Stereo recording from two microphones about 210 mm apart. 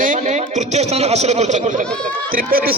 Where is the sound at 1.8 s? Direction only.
5° left (ahead or behind).